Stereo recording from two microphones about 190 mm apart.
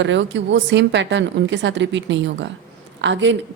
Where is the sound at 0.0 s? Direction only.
70° right (ahead or behind).